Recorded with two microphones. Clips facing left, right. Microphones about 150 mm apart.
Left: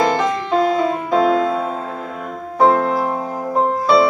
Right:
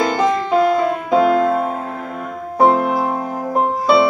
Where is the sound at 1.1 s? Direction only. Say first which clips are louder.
Right 2 dB; 10° right (ahead or behind).